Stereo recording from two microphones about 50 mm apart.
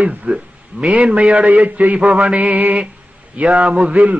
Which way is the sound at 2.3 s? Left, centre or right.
Right.